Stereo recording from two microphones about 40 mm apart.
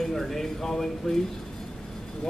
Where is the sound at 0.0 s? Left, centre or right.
Centre.